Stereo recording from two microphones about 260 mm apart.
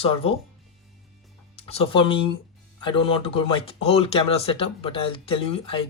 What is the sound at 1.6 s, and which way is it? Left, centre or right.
Speech, left.